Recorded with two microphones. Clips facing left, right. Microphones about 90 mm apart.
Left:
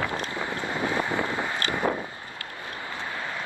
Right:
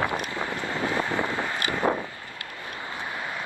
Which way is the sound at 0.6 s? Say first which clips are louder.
Even; 15° left (ahead or behind).